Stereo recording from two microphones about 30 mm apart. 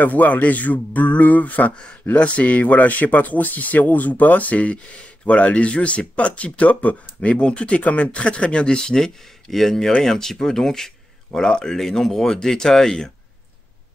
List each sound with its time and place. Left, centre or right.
0.0 s speech: left
1.8 s speech: left
9.5 s speech: centre
11.3 s speech: left
11.7 s speech: centre
12.4 s speech: left